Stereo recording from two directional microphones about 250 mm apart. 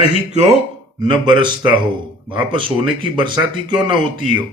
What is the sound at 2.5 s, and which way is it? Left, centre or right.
Speech, centre.